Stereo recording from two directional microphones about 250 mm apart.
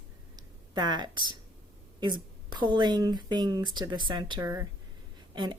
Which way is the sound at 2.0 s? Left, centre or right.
Centre.